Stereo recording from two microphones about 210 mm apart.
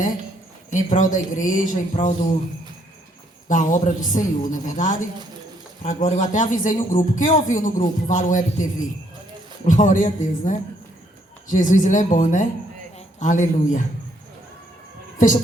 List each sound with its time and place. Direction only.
0.7 s a man's voice: 35° left (ahead or behind)
3.5 s a man's voice: 35° left (ahead or behind)
9.6 s a man's voice: 35° left (ahead or behind)